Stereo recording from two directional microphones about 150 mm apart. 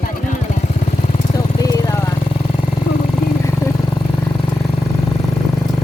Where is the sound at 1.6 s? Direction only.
25° left (ahead or behind).